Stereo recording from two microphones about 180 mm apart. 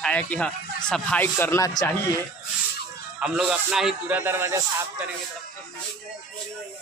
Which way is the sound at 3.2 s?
5° right (ahead or behind).